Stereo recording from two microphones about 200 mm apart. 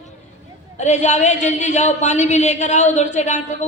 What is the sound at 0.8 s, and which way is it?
Speech, 35° left (ahead or behind).